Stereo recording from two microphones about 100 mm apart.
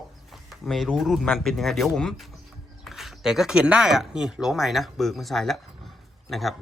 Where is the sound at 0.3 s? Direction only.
Centre (ahead or behind).